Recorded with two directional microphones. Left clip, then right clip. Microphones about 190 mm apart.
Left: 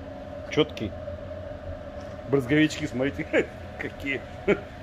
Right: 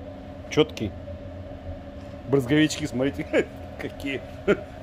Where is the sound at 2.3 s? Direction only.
25° right (ahead or behind).